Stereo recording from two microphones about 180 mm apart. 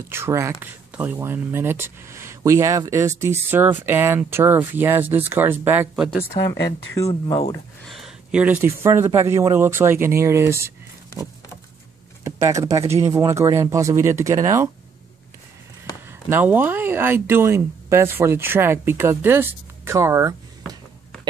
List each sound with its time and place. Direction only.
0.1 s speech: 15° right (ahead or behind)
6.4 s speech: 30° left (ahead or behind)
7.9 s speech: 5° right (ahead or behind)
12.3 s speech: 15° right (ahead or behind)
16.1 s speech: 10° right (ahead or behind)